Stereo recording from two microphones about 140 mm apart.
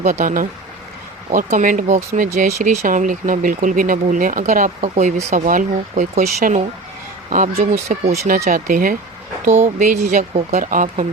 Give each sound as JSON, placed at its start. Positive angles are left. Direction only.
{"t": 0.0, "sound": "speech", "side_deg": -65}
{"t": 2.6, "sound": "speech", "side_deg": -60}
{"t": 8.4, "sound": "speech", "side_deg": -85}
{"t": 9.6, "sound": "speech", "side_deg": -65}